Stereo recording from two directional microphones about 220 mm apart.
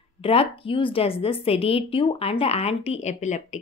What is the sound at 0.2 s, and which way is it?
Speech, 25° left (ahead or behind).